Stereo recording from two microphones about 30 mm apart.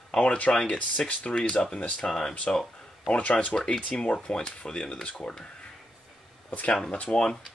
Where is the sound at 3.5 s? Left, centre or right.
Left.